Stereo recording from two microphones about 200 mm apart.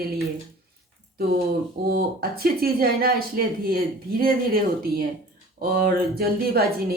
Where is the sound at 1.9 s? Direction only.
50° right (ahead or behind).